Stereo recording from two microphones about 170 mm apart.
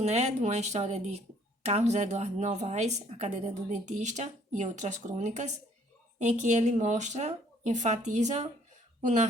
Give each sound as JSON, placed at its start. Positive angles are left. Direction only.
{"t": 0.0, "sound": "a woman's voice", "side_deg": -40}